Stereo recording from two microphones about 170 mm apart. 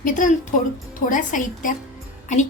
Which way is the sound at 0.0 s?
50° left (ahead or behind).